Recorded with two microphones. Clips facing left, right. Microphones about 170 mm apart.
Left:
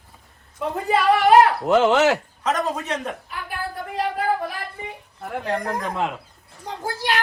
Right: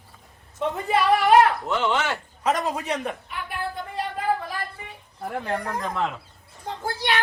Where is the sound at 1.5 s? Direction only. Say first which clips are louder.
Left 8 dB; 90° left.